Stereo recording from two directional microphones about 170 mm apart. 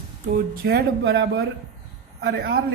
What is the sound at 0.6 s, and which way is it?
A man's voice, 75° right (ahead or behind).